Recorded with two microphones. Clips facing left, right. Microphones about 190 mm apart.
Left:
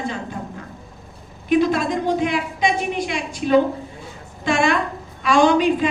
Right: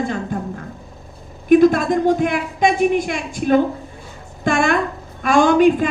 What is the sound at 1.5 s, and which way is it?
Speech, 50° right (ahead or behind).